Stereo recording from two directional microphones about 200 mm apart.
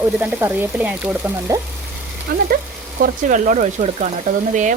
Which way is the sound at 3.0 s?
40° right (ahead or behind).